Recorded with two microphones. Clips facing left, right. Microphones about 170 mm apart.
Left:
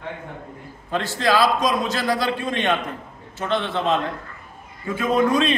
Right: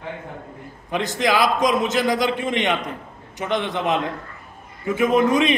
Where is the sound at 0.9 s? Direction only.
15° right (ahead or behind).